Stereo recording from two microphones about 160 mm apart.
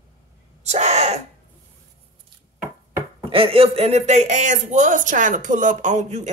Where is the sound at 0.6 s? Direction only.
45° right (ahead or behind).